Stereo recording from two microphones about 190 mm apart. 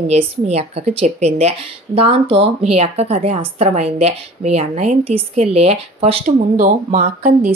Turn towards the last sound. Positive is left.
turn(degrees=-50)  # may be behind; listen again after turning